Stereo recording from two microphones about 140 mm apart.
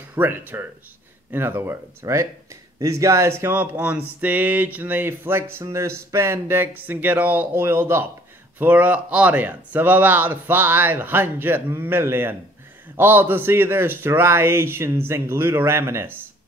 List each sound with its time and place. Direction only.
0.1 s speech: 15° right (ahead or behind)